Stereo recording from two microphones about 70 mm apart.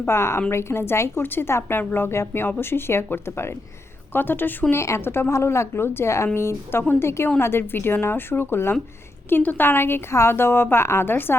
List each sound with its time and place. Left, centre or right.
0.1 s a woman's voice: left
4.7 s a woman's voice: left